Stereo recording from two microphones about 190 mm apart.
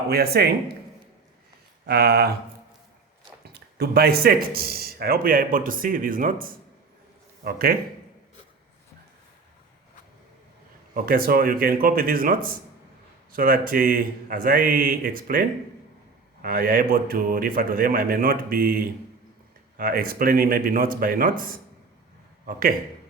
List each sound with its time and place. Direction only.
0.1 s speech: 55° right (ahead or behind)
1.9 s speech: 55° right (ahead or behind)
3.4 s speech: 55° right (ahead or behind)
10.9 s speech: 50° right (ahead or behind)